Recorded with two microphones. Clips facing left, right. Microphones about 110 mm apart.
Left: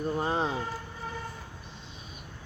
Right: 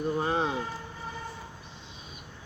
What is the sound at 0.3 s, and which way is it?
Speech, 35° left (ahead or behind).